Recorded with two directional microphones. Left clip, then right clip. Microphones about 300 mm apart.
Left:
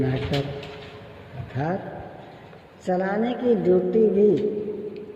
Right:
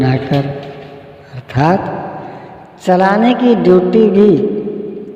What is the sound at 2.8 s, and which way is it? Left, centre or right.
Music, right.